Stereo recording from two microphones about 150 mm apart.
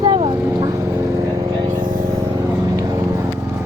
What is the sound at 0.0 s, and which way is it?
Vehicle, 30° right (ahead or behind).